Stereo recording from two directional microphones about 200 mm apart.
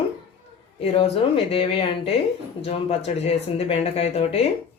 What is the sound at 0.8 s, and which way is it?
Speech, 30° left (ahead or behind).